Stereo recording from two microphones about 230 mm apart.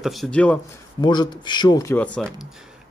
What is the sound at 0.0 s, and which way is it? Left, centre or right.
Speech, centre.